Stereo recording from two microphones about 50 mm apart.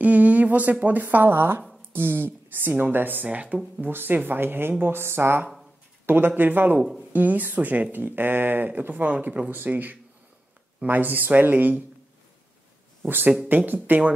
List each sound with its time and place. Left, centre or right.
0.0 s speech: right
3.8 s speech: right
5.0 s speech: right
6.0 s speech: right
9.5 s speech: right
13.5 s speech: right